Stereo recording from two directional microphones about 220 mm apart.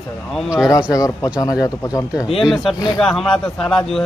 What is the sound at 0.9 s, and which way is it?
Speech, 15° left (ahead or behind).